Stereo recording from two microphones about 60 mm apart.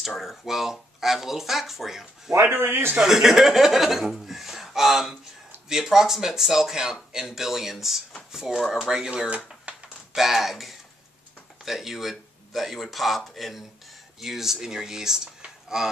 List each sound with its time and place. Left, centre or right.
0.0 s speech: centre
2.4 s a man's voice: right
3.0 s speech: centre
9.7 s a sound: right
10.1 s speech: centre